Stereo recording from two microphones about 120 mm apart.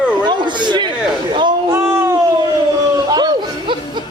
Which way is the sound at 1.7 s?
20° right (ahead or behind).